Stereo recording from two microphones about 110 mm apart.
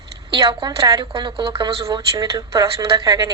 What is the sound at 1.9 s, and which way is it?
A woman's voice, 35° right (ahead or behind).